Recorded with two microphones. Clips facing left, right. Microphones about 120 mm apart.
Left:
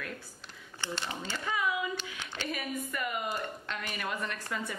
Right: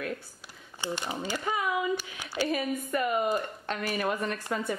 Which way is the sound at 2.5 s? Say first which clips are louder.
Right 5 dB; 35° right (ahead or behind).